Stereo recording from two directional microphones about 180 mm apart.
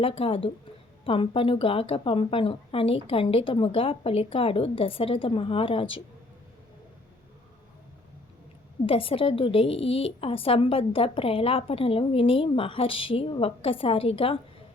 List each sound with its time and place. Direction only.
0.0 s a woman's voice: 30° left (ahead or behind)
8.9 s a woman's voice: 30° left (ahead or behind)